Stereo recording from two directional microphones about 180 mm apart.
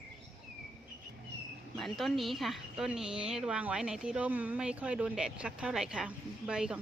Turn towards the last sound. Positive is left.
turn(degrees=-5)  # may be behind; listen again after turning